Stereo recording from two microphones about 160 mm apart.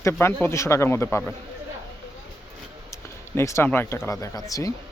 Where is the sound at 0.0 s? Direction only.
15° left (ahead or behind).